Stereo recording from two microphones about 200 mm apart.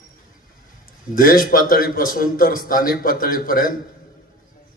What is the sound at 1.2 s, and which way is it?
A man's voice, 45° left (ahead or behind).